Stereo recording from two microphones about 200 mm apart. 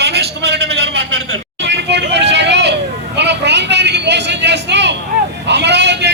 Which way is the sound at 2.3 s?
60° right (ahead or behind).